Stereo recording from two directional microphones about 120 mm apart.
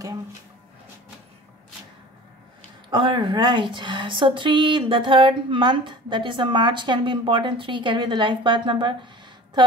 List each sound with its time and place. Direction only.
2.9 s a woman's voice: 40° right (ahead or behind)